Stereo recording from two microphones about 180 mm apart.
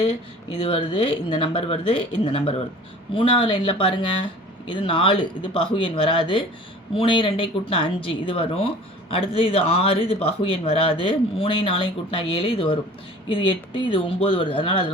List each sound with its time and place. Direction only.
0.0 s speech: 30° left (ahead or behind)